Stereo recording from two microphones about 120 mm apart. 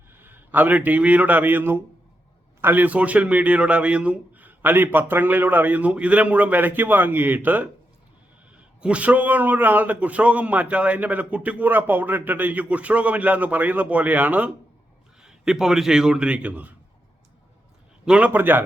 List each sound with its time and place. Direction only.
0.1 s a man's voice: 15° right (ahead or behind)
18.0 s a man's voice: 10° right (ahead or behind)